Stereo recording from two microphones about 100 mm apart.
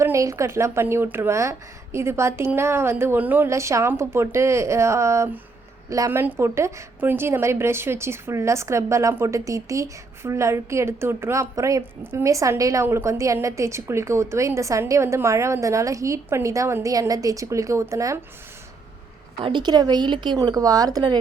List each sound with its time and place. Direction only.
0.0 s a woman's voice: 30° right (ahead or behind)
3.5 s a woman's voice: 30° right (ahead or behind)
19.4 s a woman's voice: 55° right (ahead or behind)